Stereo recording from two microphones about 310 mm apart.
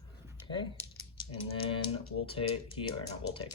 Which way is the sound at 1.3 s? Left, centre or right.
Centre.